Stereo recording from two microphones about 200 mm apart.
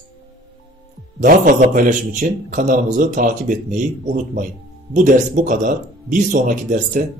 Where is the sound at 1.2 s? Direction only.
40° right (ahead or behind).